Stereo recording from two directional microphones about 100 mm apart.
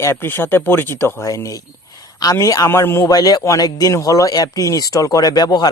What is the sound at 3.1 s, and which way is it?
Speech, 40° left (ahead or behind).